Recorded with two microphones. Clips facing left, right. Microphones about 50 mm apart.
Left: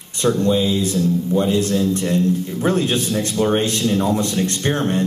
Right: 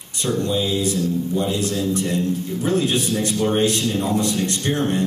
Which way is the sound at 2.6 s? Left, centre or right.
Left.